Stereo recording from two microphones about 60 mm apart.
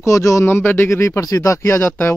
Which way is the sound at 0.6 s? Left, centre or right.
Left.